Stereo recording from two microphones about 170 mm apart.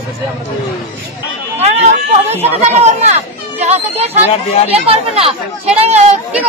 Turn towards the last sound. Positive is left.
turn(degrees=-40)  # may be behind; listen again after turning